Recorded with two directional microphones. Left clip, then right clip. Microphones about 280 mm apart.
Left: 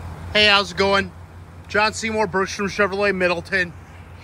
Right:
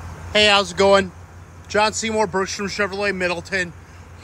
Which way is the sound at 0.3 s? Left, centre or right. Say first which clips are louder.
Even; centre.